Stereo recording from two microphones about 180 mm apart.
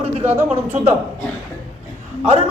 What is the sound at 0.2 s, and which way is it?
Speech, 10° right (ahead or behind).